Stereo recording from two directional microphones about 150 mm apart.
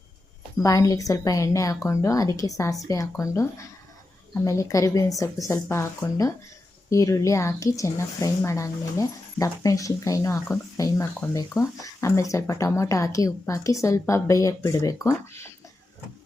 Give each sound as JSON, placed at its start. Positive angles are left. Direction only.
{"t": 0.6, "sound": "speech", "side_deg": 20}